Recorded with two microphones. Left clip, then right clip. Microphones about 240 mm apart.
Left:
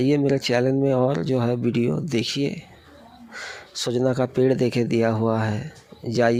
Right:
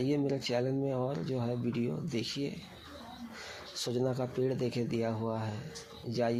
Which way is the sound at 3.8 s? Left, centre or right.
Left.